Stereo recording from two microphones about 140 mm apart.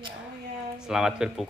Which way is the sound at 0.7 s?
5° right (ahead or behind).